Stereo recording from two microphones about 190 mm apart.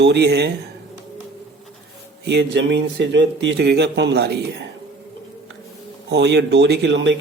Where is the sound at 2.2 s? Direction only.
65° right (ahead or behind).